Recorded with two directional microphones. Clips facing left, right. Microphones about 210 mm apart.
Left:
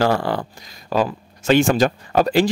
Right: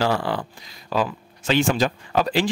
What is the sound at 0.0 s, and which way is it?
Speech, 45° left (ahead or behind).